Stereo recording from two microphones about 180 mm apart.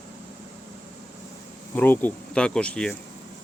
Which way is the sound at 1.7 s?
10° left (ahead or behind).